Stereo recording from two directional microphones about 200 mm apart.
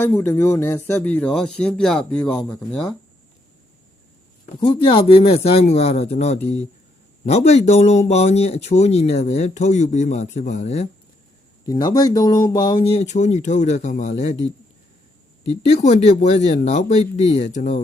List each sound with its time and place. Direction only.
0.0 s speech: 10° left (ahead or behind)
4.6 s speech: 25° left (ahead or behind)
11.6 s speech: 20° left (ahead or behind); by 17.7 s 40° left (ahead or behind)